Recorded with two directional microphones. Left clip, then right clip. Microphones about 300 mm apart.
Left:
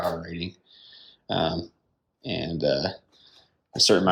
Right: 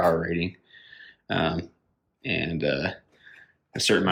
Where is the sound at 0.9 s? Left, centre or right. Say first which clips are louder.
Even; centre.